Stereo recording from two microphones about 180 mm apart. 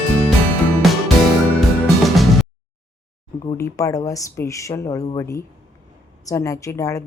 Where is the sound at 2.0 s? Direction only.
Centre (ahead or behind).